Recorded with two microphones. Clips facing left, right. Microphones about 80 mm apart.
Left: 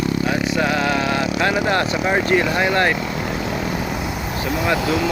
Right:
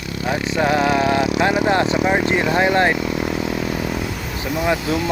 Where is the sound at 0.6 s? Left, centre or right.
Right.